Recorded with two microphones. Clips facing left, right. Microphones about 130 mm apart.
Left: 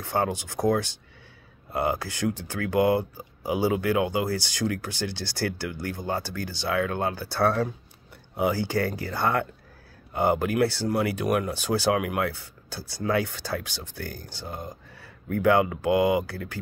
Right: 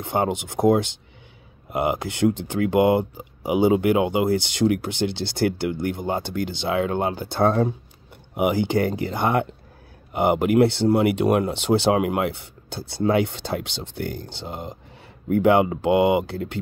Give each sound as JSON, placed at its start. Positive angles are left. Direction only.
{"t": 0.0, "sound": "speech", "side_deg": -20}